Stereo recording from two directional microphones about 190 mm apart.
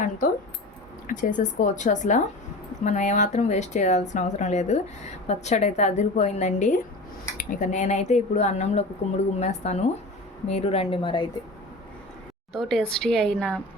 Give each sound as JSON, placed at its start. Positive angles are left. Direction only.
{"t": 1.0, "sound": "a woman's voice", "side_deg": 45}
{"t": 12.5, "sound": "a woman's voice", "side_deg": 0}